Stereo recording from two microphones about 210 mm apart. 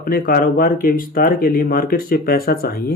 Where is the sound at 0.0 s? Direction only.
45° left (ahead or behind).